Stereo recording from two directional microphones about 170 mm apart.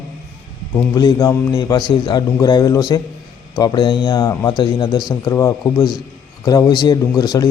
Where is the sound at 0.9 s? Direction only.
20° left (ahead or behind).